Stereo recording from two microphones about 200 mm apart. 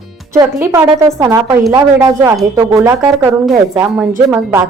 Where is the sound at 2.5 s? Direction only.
15° right (ahead or behind).